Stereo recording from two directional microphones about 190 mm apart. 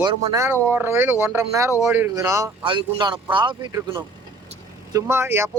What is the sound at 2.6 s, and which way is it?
Speech, 25° right (ahead or behind).